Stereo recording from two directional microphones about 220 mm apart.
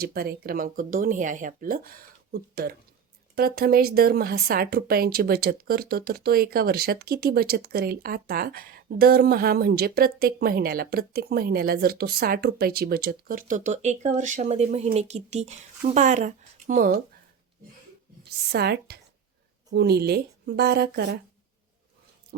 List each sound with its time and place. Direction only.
0.0 s speech: 45° right (ahead or behind)
18.5 s speech: 50° right (ahead or behind)